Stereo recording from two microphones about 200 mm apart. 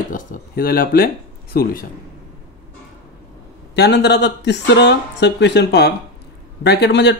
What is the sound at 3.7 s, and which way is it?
Speech, 55° left (ahead or behind).